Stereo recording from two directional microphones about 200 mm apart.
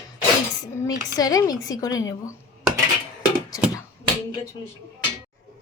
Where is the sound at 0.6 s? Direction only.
15° left (ahead or behind).